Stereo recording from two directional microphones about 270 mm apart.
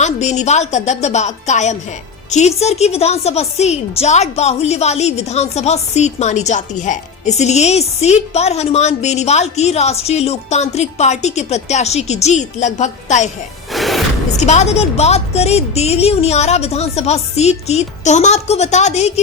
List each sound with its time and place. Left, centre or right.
0.0 s a woman's voice: left
13.7 s music: centre
14.3 s a woman's voice: left